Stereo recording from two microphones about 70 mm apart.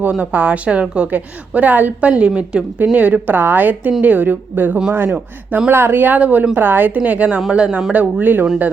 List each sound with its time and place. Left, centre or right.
0.2 s speech: right
7.9 s speech: right